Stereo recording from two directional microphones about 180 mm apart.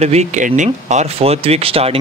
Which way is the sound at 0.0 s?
35° right (ahead or behind).